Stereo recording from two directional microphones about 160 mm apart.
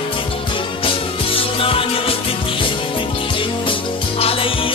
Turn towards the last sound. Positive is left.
turn(degrees=35)  # may be behind; listen again after turning